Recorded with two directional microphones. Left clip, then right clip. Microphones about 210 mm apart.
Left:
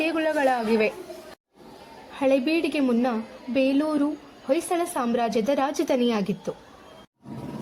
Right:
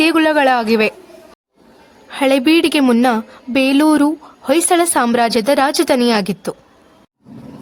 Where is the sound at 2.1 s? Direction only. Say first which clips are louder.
Right 9 dB; 30° right (ahead or behind).